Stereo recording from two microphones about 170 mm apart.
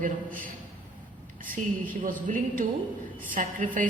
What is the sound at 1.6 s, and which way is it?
Speech, 45° right (ahead or behind).